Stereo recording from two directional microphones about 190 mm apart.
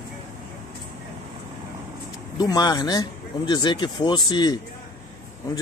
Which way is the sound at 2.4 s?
20° left (ahead or behind).